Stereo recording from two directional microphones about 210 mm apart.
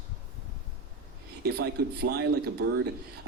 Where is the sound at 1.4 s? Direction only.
50° right (ahead or behind).